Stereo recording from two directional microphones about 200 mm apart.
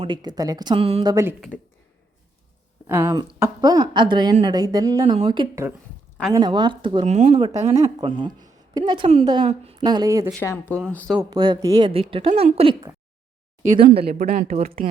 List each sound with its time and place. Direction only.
0.0 s a woman's voice: 20° right (ahead or behind)
1.1 s speech: 15° right (ahead or behind)
2.8 s a woman's voice: 10° right (ahead or behind); by 7.3 s 35° right (ahead or behind)
7.3 s a woman's voice: 25° right (ahead or behind)
10.3 s speech: 10° left (ahead or behind)
11.2 s a woman's voice: 20° right (ahead or behind)
14.0 s a woman's voice: 50° right (ahead or behind)